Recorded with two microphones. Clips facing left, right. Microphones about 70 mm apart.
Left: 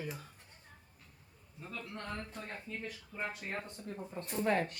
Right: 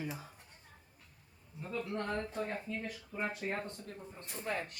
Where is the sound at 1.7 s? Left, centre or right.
Right.